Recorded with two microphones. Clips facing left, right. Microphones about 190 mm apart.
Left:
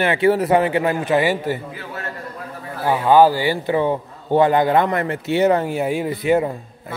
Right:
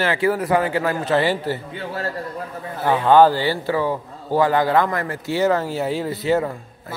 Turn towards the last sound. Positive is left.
turn(degrees=15)  # may be behind; listen again after turning